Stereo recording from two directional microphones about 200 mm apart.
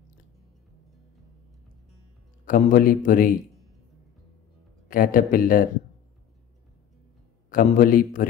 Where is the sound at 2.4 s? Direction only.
45° left (ahead or behind).